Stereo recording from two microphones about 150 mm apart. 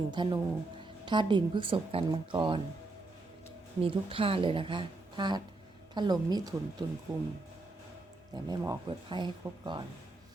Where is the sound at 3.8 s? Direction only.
35° right (ahead or behind).